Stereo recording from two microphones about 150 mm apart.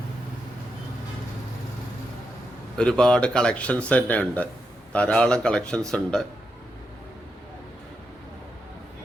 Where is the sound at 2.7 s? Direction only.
5° left (ahead or behind).